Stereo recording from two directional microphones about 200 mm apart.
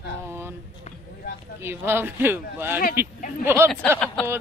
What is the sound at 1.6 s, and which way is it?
Speech, 10° right (ahead or behind).